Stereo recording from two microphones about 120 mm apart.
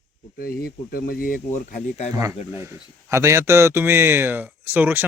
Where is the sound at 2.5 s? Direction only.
20° right (ahead or behind).